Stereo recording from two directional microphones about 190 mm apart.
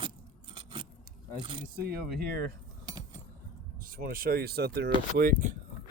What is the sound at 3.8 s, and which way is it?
Speech, 50° right (ahead or behind).